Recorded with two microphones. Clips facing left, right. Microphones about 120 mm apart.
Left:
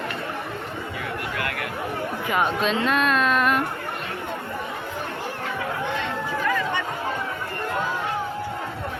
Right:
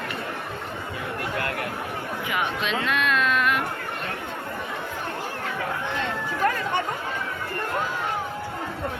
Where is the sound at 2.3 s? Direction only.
40° left (ahead or behind).